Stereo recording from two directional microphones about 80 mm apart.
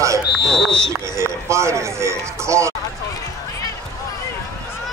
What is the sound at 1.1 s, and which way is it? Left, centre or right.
Speech, right.